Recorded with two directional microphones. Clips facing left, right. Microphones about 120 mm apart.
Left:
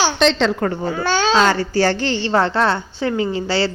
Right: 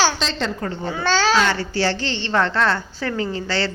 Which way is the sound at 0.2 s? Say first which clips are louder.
Left 9 dB; 75° left (ahead or behind).